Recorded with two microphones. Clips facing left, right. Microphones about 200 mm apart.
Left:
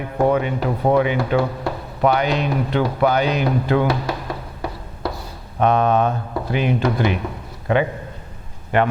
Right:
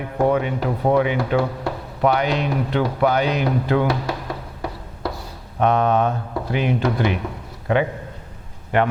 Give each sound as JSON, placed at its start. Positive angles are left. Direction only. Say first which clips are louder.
{"t": 0.0, "sound": "speech", "louder": "left 1 dB", "side_deg": 20}
{"t": 1.0, "sound": "speech", "louder": "left 1 dB", "side_deg": 20}
{"t": 2.0, "sound": "speech", "louder": "left 1 dB", "side_deg": 15}
{"t": 3.5, "sound": "a sound", "louder": "left 1 dB", "side_deg": 20}
{"t": 5.5, "sound": "speech", "louder": "left 1 dB", "side_deg": 20}